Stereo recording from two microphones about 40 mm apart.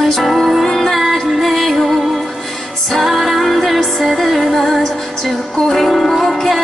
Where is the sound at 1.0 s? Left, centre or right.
Centre.